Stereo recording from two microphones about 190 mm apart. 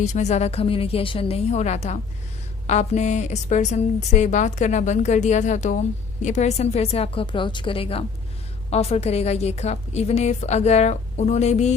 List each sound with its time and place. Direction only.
0.0 s a woman's voice: 40° left (ahead or behind)